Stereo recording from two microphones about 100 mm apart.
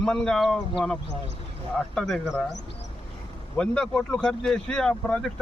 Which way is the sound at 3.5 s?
10° left (ahead or behind).